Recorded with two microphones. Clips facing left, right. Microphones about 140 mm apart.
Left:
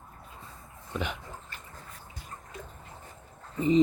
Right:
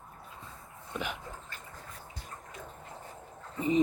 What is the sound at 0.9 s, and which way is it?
Dog, 5° right (ahead or behind).